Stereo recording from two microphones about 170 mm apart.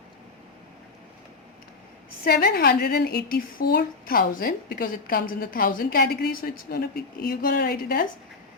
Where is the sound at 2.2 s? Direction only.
65° left (ahead or behind).